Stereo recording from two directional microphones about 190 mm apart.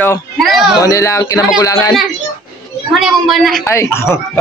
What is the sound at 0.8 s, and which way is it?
Speech, 15° left (ahead or behind).